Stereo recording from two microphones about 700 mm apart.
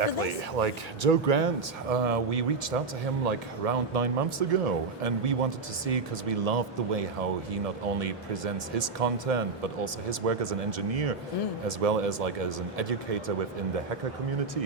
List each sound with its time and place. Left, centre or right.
0.0 s speech: right